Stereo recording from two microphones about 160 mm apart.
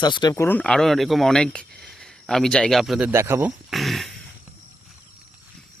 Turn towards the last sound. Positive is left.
turn(degrees=0)  # may be behind; listen again after turning